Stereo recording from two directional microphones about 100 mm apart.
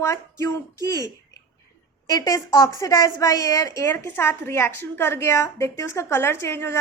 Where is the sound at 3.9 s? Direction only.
20° left (ahead or behind).